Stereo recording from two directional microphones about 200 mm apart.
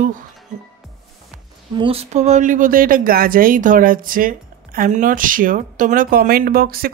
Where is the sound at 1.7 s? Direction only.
30° right (ahead or behind).